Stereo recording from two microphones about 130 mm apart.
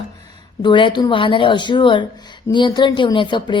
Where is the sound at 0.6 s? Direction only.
40° left (ahead or behind).